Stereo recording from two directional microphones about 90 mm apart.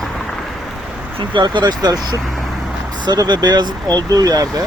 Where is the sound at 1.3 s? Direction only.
60° right (ahead or behind).